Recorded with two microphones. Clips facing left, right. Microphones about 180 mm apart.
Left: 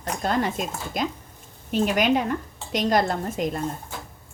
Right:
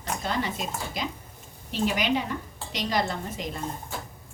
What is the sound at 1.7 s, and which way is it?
A woman's voice, 50° left (ahead or behind).